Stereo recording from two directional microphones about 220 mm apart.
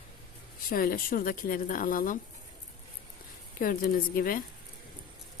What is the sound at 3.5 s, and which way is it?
Speech, 40° left (ahead or behind).